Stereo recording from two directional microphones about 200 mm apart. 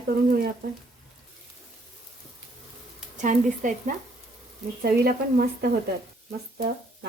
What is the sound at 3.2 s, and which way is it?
Speech, 40° right (ahead or behind).